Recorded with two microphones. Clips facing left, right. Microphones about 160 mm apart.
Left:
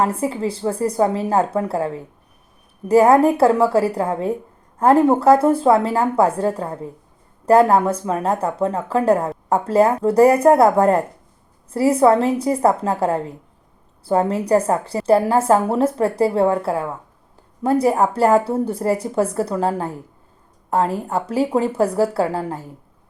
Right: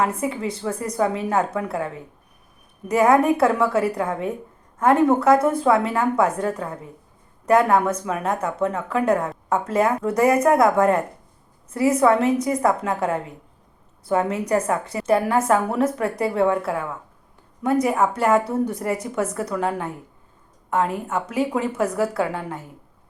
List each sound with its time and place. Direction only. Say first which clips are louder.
0.0 s a woman's voice: left 3 dB; 30° left (ahead or behind)